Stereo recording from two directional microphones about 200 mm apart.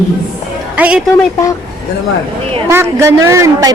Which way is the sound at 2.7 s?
15° right (ahead or behind).